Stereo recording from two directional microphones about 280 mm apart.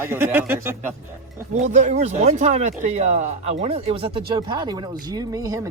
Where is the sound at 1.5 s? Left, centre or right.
Right.